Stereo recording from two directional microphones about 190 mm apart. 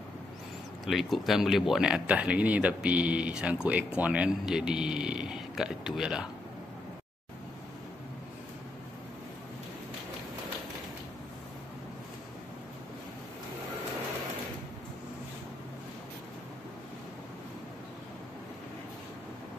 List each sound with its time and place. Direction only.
0.8 s speech: centre (ahead or behind)